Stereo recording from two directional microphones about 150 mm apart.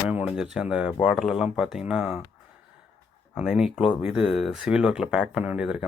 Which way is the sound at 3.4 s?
5° right (ahead or behind).